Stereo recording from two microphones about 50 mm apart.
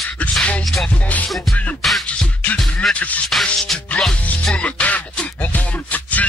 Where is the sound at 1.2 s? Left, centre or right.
Centre.